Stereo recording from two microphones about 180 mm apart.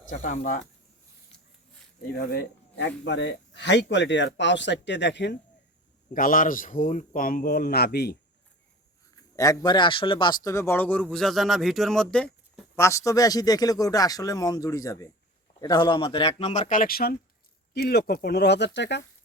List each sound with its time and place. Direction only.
0.1 s a man's voice: 45° left (ahead or behind)
2.1 s speech: 60° left (ahead or behind)
6.1 s a man's voice: 50° left (ahead or behind)
9.3 s speech: 20° left (ahead or behind); by 19.0 s 75° left (ahead or behind)